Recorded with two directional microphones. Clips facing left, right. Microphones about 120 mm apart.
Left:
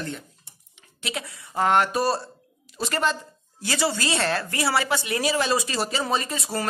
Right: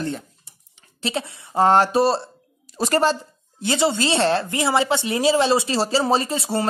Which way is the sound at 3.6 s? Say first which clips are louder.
Right 5 dB; 20° right (ahead or behind).